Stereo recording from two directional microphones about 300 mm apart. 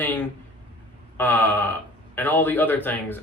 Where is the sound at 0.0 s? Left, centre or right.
Centre.